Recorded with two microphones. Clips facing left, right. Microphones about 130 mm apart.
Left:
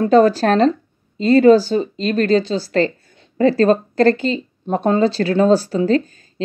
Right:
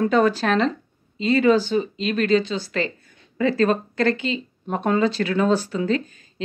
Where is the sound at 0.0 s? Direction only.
35° left (ahead or behind).